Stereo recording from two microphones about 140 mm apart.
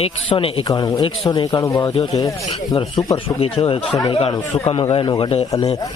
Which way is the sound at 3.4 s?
40° left (ahead or behind).